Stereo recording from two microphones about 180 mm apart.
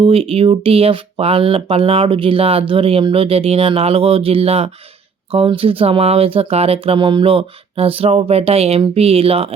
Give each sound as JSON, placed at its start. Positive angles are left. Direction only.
{"t": 0.0, "sound": "speech", "side_deg": -30}